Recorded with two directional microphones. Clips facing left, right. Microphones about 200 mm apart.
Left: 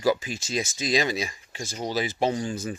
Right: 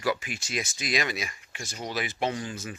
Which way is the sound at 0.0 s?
30° left (ahead or behind).